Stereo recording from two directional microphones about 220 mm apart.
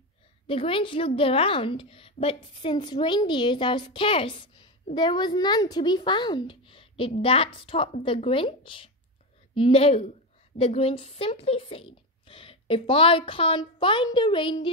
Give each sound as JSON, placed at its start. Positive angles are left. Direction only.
{"t": 0.5, "sound": "a woman's voice", "side_deg": 25}